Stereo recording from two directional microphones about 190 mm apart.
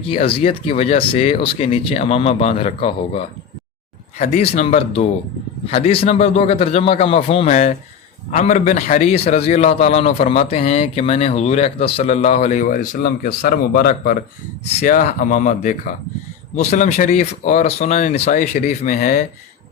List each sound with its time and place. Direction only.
0.0 s speech: 30° left (ahead or behind)
4.2 s speech: 35° left (ahead or behind)